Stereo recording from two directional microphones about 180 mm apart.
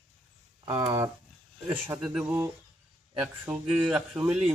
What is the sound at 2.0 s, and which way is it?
Speech, 5° right (ahead or behind).